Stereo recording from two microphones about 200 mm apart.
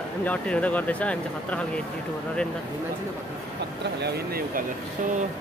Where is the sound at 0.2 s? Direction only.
5° left (ahead or behind).